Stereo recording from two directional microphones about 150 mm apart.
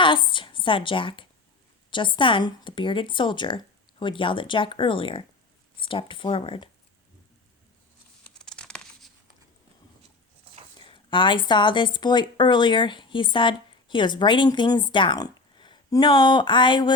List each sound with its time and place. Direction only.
0.0 s a woman's voice: 35° left (ahead or behind)
8.3 s tearing: 5° left (ahead or behind)
10.8 s speech: 35° left (ahead or behind)